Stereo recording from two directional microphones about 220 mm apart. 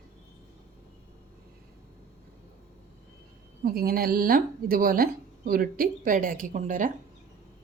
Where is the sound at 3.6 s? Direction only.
40° right (ahead or behind).